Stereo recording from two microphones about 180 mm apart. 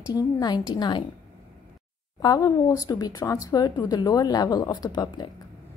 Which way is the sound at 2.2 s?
20° left (ahead or behind).